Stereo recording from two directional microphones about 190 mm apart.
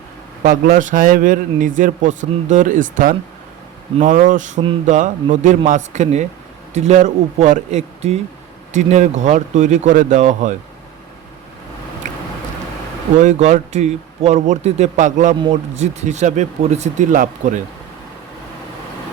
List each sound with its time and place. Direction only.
0.4 s a man's voice: 45° right (ahead or behind)
12.0 s a sound: 40° right (ahead or behind)
13.1 s speech: 40° right (ahead or behind)
15.4 s speech: 30° right (ahead or behind)